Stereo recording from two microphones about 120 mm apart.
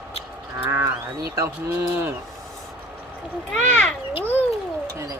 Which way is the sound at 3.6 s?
10° left (ahead or behind).